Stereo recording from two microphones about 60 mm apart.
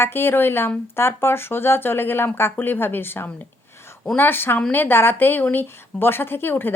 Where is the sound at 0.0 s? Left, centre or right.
Left.